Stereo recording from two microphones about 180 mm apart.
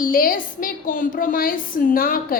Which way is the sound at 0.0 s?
50° left (ahead or behind).